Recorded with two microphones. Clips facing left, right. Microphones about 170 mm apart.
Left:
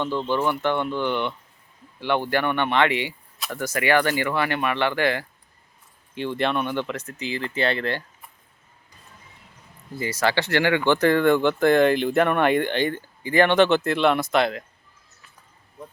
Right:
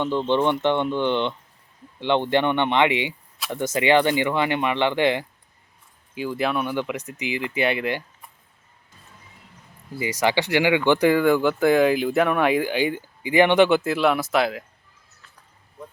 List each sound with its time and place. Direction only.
0.0 s speech: 20° right (ahead or behind)
6.1 s speech: 5° right (ahead or behind)
9.9 s speech: 15° right (ahead or behind)